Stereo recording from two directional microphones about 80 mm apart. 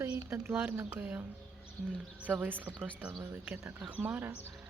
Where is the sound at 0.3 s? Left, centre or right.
Right.